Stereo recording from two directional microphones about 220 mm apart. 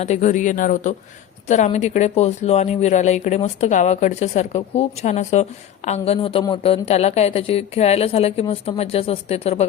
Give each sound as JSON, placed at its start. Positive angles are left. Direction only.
{"t": 0.0, "sound": "speech", "side_deg": 30}